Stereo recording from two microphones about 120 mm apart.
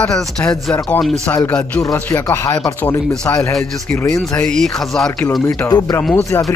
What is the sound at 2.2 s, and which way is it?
Speech, 25° left (ahead or behind).